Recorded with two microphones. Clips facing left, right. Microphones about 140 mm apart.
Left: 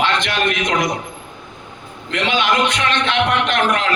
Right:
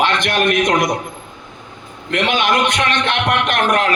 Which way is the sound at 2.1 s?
50° right (ahead or behind).